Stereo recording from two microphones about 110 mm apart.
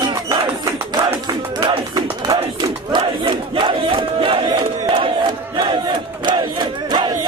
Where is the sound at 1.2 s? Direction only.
40° right (ahead or behind).